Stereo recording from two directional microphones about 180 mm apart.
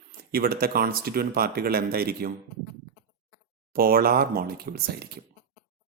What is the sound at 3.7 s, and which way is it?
Speech, 55° right (ahead or behind).